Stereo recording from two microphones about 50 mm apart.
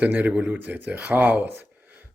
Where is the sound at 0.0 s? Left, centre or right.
Right.